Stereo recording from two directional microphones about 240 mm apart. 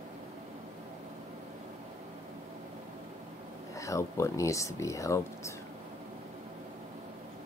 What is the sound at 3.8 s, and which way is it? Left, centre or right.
Speech, centre.